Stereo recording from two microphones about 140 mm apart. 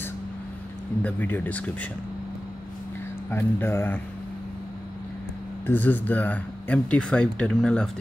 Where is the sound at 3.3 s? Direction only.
15° left (ahead or behind).